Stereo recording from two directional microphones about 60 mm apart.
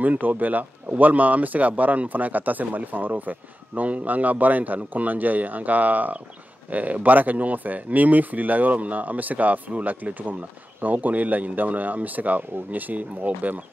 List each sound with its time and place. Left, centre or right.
0.0 s speech: right